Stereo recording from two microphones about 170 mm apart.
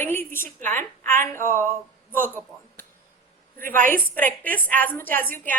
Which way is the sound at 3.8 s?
55° right (ahead or behind).